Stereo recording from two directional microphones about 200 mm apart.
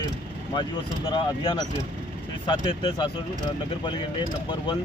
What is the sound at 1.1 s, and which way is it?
Speech, 25° left (ahead or behind).